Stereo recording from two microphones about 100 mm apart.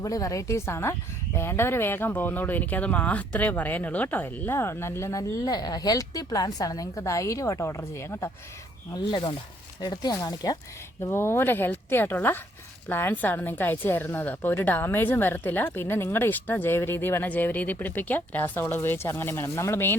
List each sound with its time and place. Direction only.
0.0 s speech: 35° left (ahead or behind)
8.9 s speech: 45° left (ahead or behind)
11.0 s speech: 25° left (ahead or behind)